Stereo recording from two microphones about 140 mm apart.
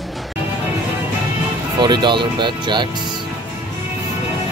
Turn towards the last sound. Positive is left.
turn(degrees=-35)  # may be behind; listen again after turning